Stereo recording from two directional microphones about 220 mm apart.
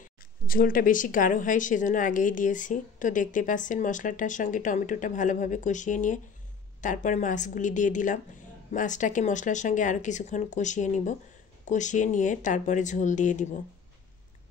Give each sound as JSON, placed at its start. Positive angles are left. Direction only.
{"t": 0.5, "sound": "a woman's voice", "side_deg": 40}